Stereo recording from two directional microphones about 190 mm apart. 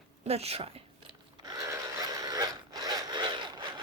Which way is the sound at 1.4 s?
15° right (ahead or behind).